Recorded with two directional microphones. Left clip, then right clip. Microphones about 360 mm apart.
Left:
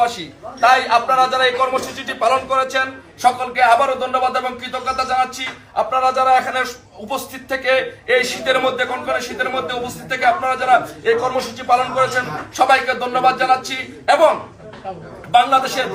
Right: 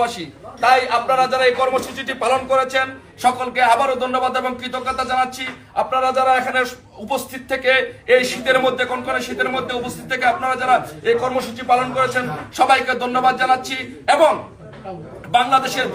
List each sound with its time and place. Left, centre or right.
0.6 s a man's voice: centre
15.3 s a man's voice: centre